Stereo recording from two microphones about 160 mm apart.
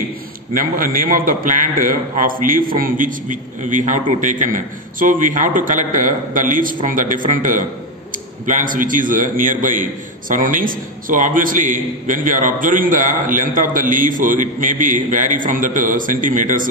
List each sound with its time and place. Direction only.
0.6 s a man's voice: 60° right (ahead or behind)